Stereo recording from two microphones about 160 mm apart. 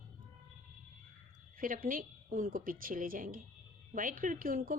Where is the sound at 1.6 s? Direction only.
60° right (ahead or behind).